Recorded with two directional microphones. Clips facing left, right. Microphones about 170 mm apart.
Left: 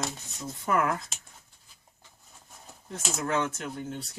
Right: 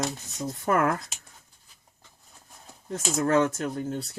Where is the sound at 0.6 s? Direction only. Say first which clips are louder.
Right 3 dB; 45° right (ahead or behind).